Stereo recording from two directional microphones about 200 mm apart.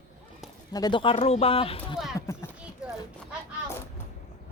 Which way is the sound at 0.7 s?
20° left (ahead or behind).